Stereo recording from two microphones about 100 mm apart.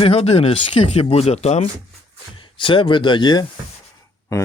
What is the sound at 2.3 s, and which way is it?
Speech, 60° left (ahead or behind).